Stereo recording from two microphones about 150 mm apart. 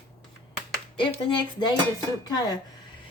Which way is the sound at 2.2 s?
25° left (ahead or behind).